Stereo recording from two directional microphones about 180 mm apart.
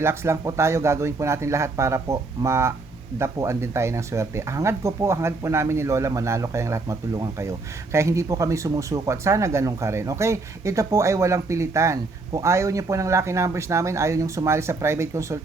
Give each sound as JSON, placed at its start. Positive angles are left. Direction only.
{"t": 0.0, "sound": "speech", "side_deg": -15}